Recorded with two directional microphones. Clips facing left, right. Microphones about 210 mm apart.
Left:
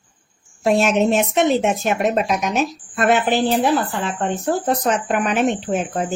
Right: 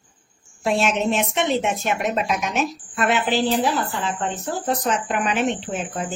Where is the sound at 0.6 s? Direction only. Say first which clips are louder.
Left 5 dB; 45° left (ahead or behind).